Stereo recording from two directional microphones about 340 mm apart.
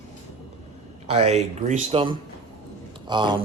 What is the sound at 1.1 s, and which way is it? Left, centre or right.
Speech, centre.